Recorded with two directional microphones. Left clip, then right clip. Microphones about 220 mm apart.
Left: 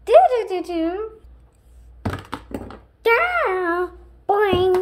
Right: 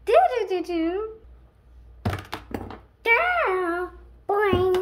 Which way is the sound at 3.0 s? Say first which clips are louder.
Left 3 dB; 15° left (ahead or behind).